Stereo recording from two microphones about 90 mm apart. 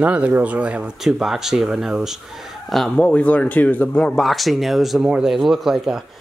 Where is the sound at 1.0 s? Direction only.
5° right (ahead or behind).